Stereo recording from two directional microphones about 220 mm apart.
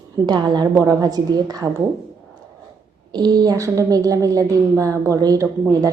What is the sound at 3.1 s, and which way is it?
A woman's voice, 20° right (ahead or behind).